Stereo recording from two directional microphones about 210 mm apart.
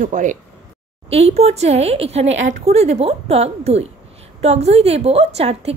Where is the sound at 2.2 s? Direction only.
65° right (ahead or behind).